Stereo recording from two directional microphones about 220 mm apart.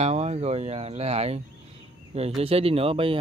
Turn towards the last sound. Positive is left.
turn(degrees=-25)  # may be behind; listen again after turning